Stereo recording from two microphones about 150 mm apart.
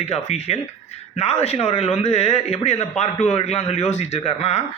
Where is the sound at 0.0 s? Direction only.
45° left (ahead or behind).